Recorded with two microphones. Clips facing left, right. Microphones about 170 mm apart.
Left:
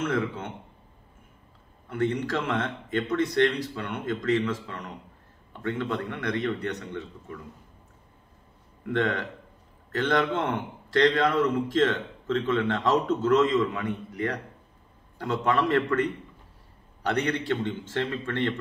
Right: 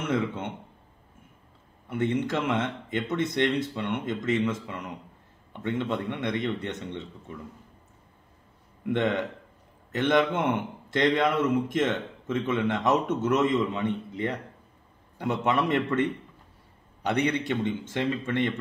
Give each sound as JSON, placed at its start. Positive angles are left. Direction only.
{"t": 1.9, "sound": "a man's voice", "side_deg": -20}
{"t": 8.8, "sound": "a man's voice", "side_deg": -20}